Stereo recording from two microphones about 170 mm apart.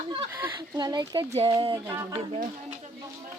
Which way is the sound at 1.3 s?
35° right (ahead or behind).